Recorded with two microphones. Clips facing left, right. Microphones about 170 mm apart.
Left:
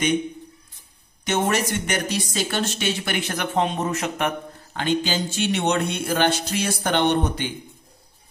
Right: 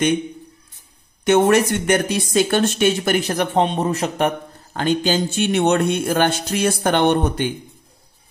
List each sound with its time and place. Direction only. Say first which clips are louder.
1.2 s speech: right 8 dB; 60° right (ahead or behind)